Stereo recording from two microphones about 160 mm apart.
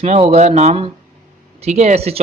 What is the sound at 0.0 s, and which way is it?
A man's voice, 40° right (ahead or behind).